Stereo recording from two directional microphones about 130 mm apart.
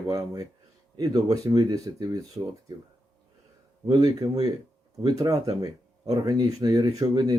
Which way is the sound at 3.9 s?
30° right (ahead or behind).